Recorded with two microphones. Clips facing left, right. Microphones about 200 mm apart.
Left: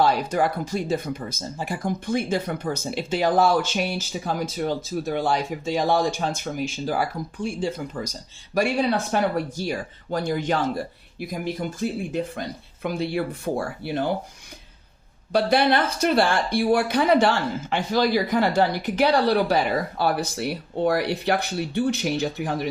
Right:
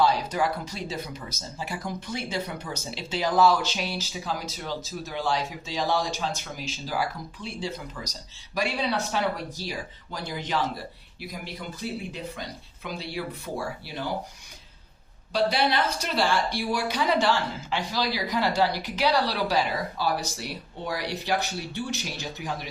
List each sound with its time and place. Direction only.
0.0 s speech: 55° left (ahead or behind)
15.3 s a woman's voice: 55° left (ahead or behind)